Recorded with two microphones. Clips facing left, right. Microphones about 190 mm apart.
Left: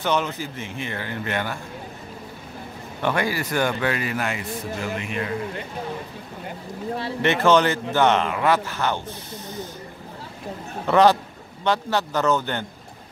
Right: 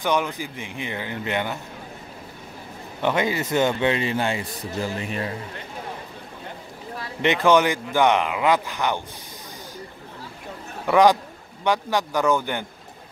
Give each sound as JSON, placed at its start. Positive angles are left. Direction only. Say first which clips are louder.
{"t": 0.0, "sound": "speech", "louder": "even", "side_deg": -15}
{"t": 3.0, "sound": "a man's voice", "louder": "right 1 dB", "side_deg": -20}
{"t": 7.2, "sound": "speech", "louder": "even", "side_deg": -15}
{"t": 10.9, "sound": "speech", "louder": "even", "side_deg": -10}